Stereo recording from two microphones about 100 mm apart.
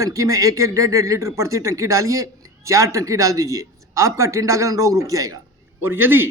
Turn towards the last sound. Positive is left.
turn(degrees=-20)  # may be behind; listen again after turning